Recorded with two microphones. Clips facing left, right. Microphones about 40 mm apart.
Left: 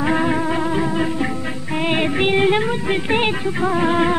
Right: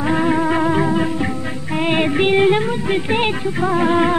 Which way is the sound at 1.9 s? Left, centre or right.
Centre.